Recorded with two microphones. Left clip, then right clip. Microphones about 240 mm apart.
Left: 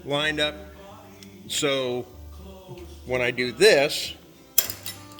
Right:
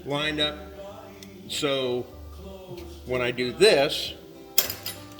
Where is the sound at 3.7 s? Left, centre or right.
Left.